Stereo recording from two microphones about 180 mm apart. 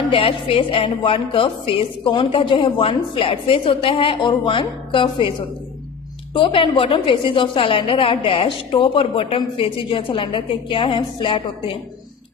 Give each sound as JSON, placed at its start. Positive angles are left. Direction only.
{"t": 0.1, "sound": "a woman's voice", "side_deg": 30}
{"t": 6.3, "sound": "a woman's voice", "side_deg": 30}